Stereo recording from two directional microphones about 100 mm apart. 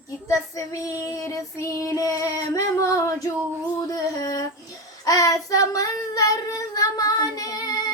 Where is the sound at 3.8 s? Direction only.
40° left (ahead or behind).